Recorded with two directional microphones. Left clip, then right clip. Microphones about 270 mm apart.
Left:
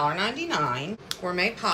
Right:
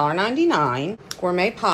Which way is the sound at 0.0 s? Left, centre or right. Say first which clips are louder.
Right 6 dB; centre.